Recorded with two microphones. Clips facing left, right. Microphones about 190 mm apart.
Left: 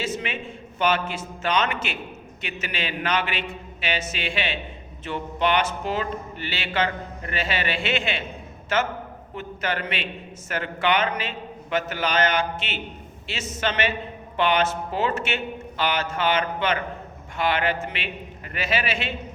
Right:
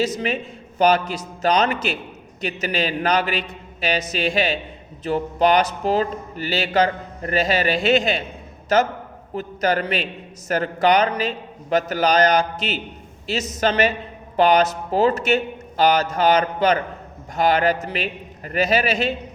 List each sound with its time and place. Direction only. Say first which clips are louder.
0.0 s a man's voice: right 7 dB; 40° right (ahead or behind)